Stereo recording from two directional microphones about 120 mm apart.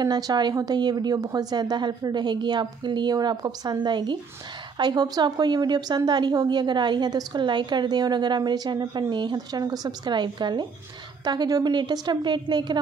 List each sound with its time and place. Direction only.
0.0 s a woman's voice: 35° right (ahead or behind)